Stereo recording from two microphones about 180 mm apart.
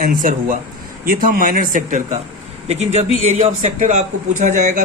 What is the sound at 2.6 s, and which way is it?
Speech, 35° right (ahead or behind).